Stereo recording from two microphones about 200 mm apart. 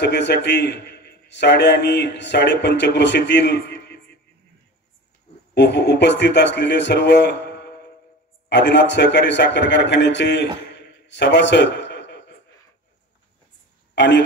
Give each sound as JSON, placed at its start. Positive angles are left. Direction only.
{"t": 0.0, "sound": "a man's voice", "side_deg": 55}
{"t": 5.5, "sound": "a man's voice", "side_deg": 60}
{"t": 10.7, "sound": "a sound", "side_deg": 60}
{"t": 13.9, "sound": "speech", "side_deg": 60}